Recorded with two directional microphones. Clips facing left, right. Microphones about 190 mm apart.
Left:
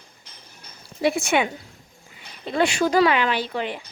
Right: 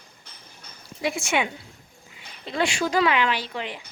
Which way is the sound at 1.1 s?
60° left (ahead or behind).